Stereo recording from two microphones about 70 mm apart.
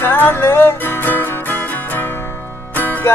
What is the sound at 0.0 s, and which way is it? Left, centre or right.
Music, left.